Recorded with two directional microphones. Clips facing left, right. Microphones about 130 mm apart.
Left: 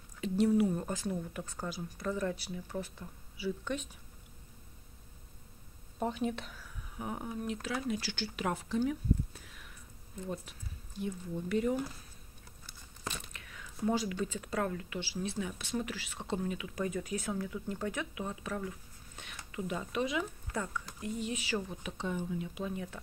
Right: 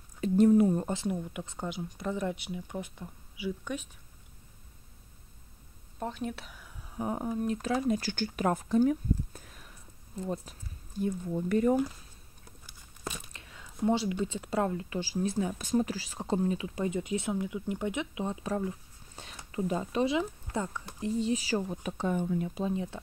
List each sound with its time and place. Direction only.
0.2 s speech: 45° right (ahead or behind); by 3.8 s 10° right (ahead or behind)
5.9 s speech: 5° left (ahead or behind)
7.0 s speech: 35° right (ahead or behind)
12.6 s crumpling: 10° right (ahead or behind)
13.3 s speech: 30° right (ahead or behind)
15.0 s speech: 40° right (ahead or behind)
22.5 s speech: 30° right (ahead or behind)